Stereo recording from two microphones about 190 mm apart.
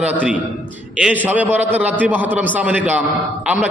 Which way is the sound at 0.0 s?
5° right (ahead or behind).